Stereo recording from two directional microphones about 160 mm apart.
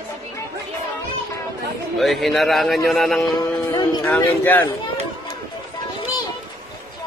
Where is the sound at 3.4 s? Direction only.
25° left (ahead or behind).